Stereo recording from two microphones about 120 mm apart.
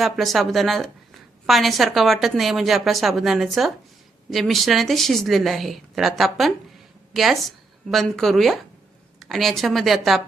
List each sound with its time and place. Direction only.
0.0 s a woman's voice: centre (ahead or behind)